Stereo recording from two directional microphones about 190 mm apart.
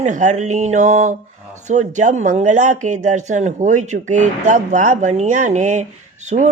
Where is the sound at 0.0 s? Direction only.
40° right (ahead or behind).